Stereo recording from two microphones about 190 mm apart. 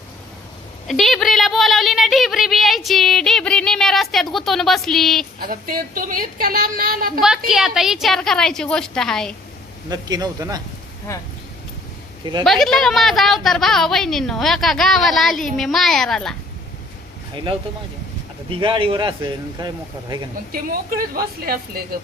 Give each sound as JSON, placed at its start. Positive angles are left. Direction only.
{"t": 0.9, "sound": "speech", "side_deg": 0}
{"t": 5.4, "sound": "a woman's voice", "side_deg": -50}
{"t": 7.2, "sound": "speech", "side_deg": -5}
{"t": 9.9, "sound": "speech", "side_deg": -20}
{"t": 11.1, "sound": "speech", "side_deg": 15}
{"t": 12.2, "sound": "speech", "side_deg": -20}
{"t": 12.5, "sound": "speech", "side_deg": 0}
{"t": 17.3, "sound": "speech", "side_deg": -25}
{"t": 18.6, "sound": "speech", "side_deg": -25}
{"t": 20.5, "sound": "a woman's voice", "side_deg": -50}